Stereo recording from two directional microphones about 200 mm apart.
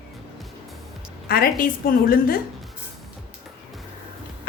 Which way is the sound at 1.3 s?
50° left (ahead or behind).